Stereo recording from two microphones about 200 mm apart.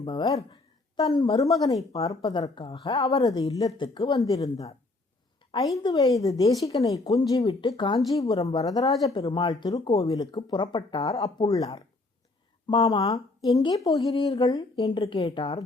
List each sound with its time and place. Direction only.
0.0 s a woman's voice: 20° left (ahead or behind)